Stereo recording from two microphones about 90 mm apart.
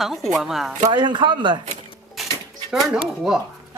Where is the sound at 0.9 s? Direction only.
60° right (ahead or behind).